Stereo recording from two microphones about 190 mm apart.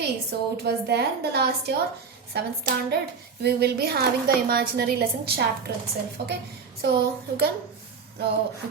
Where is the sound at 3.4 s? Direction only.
55° right (ahead or behind).